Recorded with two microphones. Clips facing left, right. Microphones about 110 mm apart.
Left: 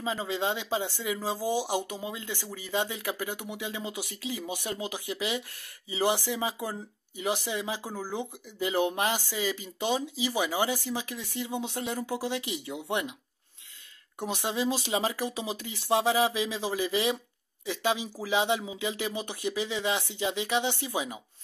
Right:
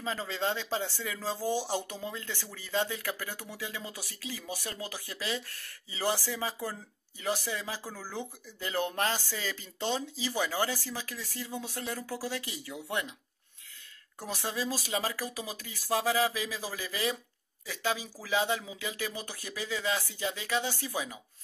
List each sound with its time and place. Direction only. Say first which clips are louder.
0.0 s speech: left 3 dB; 15° left (ahead or behind)
14.2 s speech: left 5 dB; 20° left (ahead or behind)